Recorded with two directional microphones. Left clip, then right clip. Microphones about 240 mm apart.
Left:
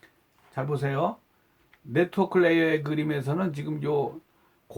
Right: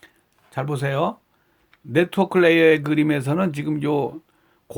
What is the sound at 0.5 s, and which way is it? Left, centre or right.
Speech, right.